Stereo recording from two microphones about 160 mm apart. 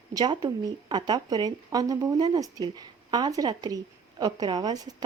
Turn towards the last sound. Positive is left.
turn(degrees=-25)  # may be behind; listen again after turning